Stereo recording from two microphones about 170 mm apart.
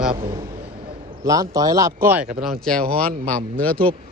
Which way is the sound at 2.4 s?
5° left (ahead or behind).